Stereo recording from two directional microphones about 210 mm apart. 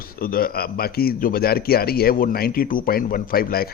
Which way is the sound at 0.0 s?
45° left (ahead or behind).